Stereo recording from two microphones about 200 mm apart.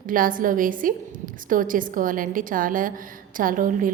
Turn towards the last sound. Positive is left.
turn(degrees=-45)  # may be behind; listen again after turning